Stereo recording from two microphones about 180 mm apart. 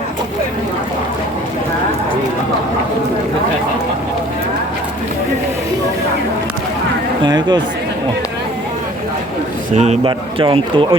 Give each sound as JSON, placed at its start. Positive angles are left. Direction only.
{"t": 7.3, "sound": "speech", "side_deg": -25}
{"t": 9.7, "sound": "a man's voice", "side_deg": -40}